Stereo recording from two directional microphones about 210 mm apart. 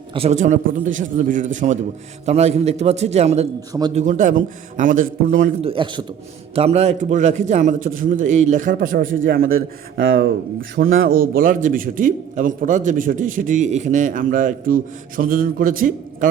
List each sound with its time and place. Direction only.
0.1 s a man's voice: 30° right (ahead or behind)
3.7 s a man's voice: 20° right (ahead or behind)
3.9 s a man's voice: 35° right (ahead or behind)
5.6 s a man's voice: 25° right (ahead or behind); by 9.5 s 45° right (ahead or behind)
11.0 s a man's voice: 45° right (ahead or behind)